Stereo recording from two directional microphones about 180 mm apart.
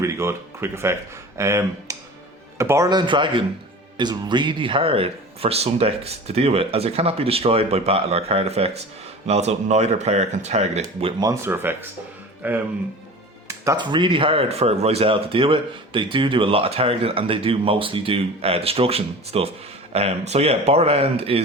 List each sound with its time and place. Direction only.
0.0 s speech: 15° right (ahead or behind); by 11.1 s 35° right (ahead or behind)
11.2 s speech: 15° right (ahead or behind)
13.5 s speech: 20° right (ahead or behind)